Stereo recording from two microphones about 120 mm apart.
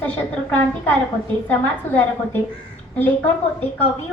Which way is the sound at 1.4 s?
15° left (ahead or behind).